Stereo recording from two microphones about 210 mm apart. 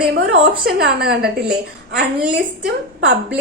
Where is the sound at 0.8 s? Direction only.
50° right (ahead or behind).